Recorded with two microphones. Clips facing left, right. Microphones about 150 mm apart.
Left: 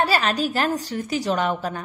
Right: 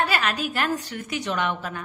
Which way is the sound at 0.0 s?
35° left (ahead or behind).